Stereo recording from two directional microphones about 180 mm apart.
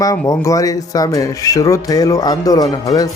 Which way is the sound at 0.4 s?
20° left (ahead or behind).